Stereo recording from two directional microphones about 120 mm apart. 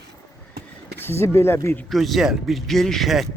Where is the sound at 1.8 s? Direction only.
Centre (ahead or behind).